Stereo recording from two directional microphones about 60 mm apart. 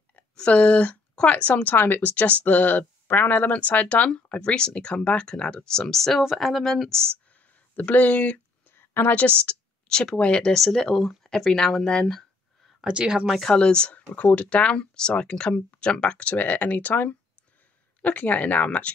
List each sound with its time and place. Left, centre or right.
0.1 s speech: left; by 7.0 s centre
7.3 s a sound: left
8.7 s a sound: left
9.5 s speech: centre
12.8 s speech: centre
13.4 s speech: centre